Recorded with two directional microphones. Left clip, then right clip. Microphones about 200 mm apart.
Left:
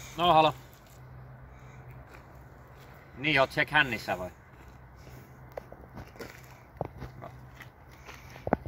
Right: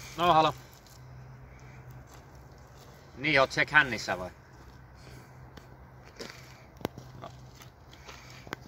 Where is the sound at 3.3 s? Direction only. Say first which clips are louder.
Right 1 dB; 30° left (ahead or behind).